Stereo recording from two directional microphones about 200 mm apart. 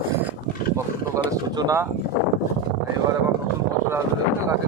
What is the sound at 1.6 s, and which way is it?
Speech, 15° right (ahead or behind).